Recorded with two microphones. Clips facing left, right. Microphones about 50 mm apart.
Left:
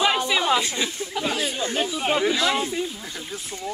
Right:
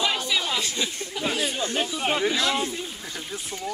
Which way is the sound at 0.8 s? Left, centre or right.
Centre.